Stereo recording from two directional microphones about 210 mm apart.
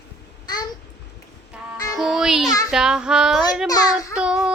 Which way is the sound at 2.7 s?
5° right (ahead or behind).